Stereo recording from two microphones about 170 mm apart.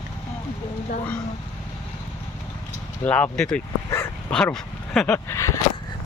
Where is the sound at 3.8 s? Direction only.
15° left (ahead or behind).